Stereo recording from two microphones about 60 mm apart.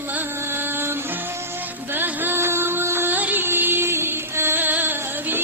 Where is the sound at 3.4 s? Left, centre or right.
Right.